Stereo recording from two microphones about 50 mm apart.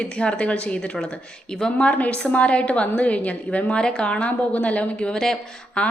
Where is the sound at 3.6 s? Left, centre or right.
Centre.